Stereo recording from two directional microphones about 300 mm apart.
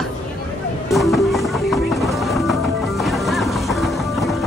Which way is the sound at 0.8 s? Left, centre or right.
Centre.